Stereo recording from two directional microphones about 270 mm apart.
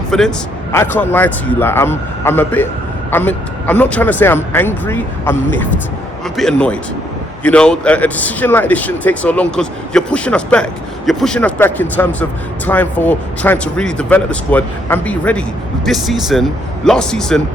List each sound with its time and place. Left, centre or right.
0.1 s a man's voice: centre